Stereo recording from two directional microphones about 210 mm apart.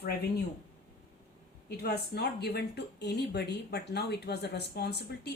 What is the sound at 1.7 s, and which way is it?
Speech, 50° left (ahead or behind).